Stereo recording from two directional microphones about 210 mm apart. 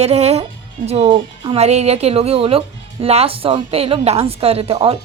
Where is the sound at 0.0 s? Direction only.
30° right (ahead or behind).